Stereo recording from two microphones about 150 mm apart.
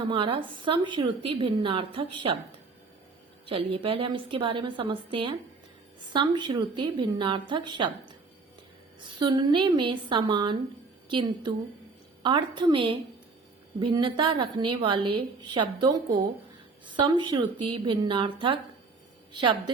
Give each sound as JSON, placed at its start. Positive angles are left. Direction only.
{"t": 0.0, "sound": "a woman's voice", "side_deg": -35}
{"t": 3.4, "sound": "a woman's voice", "side_deg": -35}